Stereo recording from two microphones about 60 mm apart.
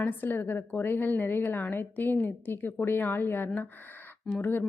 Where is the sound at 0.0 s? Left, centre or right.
Left.